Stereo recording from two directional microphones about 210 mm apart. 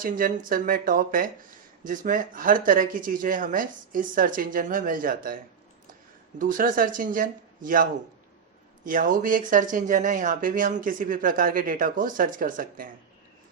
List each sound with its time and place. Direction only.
0.0 s speech: 40° right (ahead or behind)
6.4 s speech: 40° right (ahead or behind)